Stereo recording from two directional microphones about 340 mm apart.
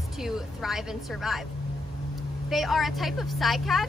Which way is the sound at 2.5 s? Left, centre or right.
Centre.